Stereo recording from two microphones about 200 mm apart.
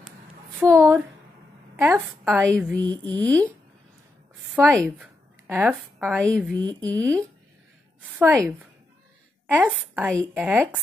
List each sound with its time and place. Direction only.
0.7 s a woman's voice: 15° right (ahead or behind)
3.1 s speech: 5° left (ahead or behind)
4.6 s a woman's voice: 10° right (ahead or behind); by 7.2 s 5° left (ahead or behind)
8.1 s a woman's voice: 10° right (ahead or behind)